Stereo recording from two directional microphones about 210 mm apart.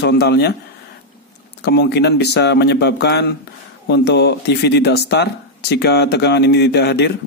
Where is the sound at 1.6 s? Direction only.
50° left (ahead or behind).